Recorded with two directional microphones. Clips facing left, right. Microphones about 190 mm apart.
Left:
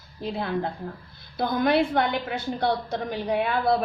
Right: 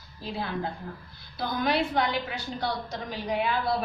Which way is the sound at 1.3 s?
50° left (ahead or behind).